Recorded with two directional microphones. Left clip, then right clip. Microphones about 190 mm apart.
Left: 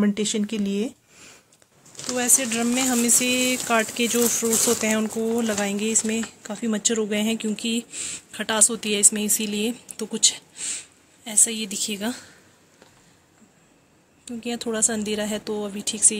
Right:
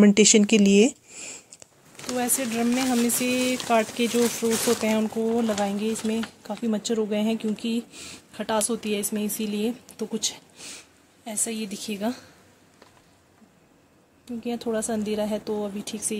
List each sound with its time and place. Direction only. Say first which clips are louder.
0.0 s speech: right 7 dB; 35° right (ahead or behind)
2.0 s speech: left 4 dB; centre (ahead or behind)
14.2 s speech: left 1 dB; centre (ahead or behind)